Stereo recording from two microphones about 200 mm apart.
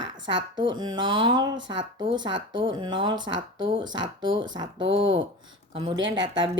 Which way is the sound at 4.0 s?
70° right (ahead or behind).